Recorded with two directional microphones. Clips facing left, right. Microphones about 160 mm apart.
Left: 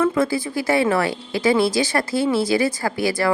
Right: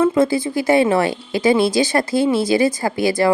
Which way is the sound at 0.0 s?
25° right (ahead or behind).